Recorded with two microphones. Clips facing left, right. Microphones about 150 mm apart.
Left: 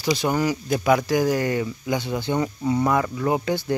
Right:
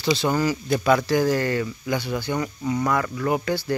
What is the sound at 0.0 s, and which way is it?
Speech, 15° left (ahead or behind).